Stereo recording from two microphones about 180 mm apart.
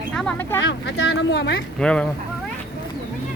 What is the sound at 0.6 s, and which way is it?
Speech, 80° left.